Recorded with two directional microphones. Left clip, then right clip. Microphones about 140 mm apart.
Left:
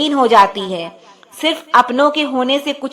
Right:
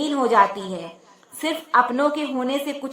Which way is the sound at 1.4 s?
25° left (ahead or behind).